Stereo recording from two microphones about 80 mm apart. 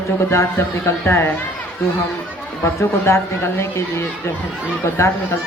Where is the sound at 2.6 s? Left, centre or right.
Left.